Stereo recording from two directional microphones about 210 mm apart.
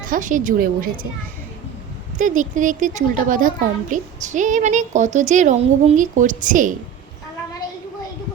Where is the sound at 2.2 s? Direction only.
40° right (ahead or behind).